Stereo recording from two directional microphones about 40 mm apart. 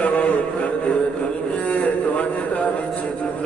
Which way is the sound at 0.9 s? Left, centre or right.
Left.